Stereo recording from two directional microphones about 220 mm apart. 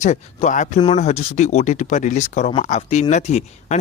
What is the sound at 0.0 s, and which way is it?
Speech, 30° left (ahead or behind).